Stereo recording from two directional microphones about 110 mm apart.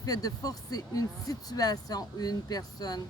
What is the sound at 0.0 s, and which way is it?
Speech, 35° left (ahead or behind).